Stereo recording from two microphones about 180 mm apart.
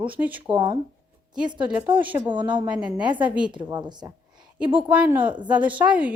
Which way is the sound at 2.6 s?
5° right (ahead or behind).